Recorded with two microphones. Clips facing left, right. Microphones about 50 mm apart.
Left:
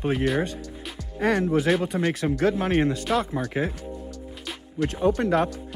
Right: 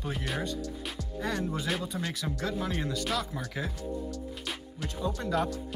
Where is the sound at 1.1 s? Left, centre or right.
Left.